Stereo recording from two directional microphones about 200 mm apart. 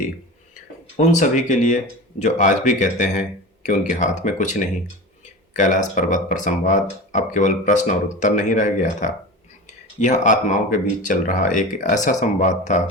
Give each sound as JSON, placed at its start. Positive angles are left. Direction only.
{"t": 0.9, "sound": "speech", "side_deg": 35}